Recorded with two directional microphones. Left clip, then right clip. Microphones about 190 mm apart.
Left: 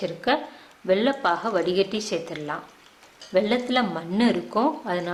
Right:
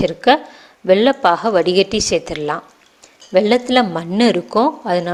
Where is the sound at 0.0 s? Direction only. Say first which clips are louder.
Right 11 dB; 35° right (ahead or behind).